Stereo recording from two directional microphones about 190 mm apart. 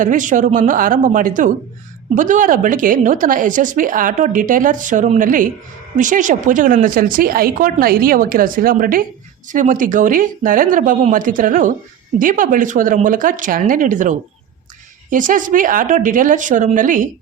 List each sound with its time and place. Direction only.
0.0 s a woman's voice: 40° right (ahead or behind)